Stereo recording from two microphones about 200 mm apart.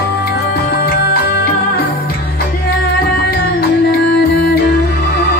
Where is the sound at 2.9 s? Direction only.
50° left (ahead or behind).